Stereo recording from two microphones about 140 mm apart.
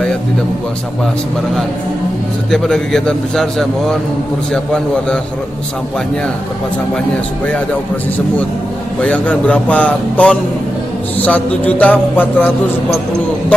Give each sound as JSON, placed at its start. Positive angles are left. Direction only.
{"t": 2.5, "sound": "a man's voice", "side_deg": 5}
{"t": 9.0, "sound": "speech", "side_deg": 10}